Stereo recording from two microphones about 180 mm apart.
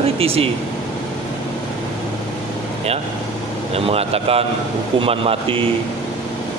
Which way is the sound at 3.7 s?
35° right (ahead or behind).